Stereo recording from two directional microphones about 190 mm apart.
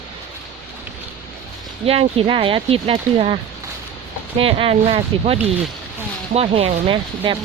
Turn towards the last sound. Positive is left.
turn(degrees=-25)  # may be behind; listen again after turning